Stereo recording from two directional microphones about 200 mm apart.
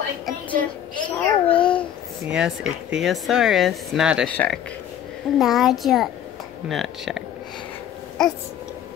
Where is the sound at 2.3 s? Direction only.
5° right (ahead or behind).